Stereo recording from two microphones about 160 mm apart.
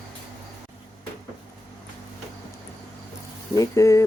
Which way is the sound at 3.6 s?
20° left (ahead or behind).